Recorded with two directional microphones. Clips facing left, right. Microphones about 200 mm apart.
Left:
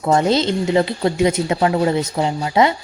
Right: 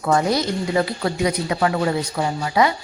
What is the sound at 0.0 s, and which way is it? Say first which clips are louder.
Speech: left 3 dB; 25° left (ahead or behind).